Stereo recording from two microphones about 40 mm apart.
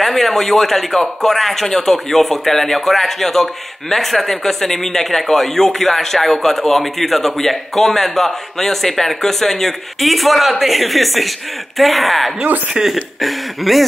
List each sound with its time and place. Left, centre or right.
0.0 s a man's voice: centre